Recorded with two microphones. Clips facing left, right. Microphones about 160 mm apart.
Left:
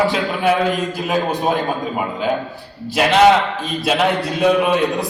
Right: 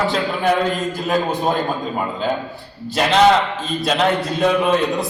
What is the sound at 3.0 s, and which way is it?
A man's voice, 10° left (ahead or behind).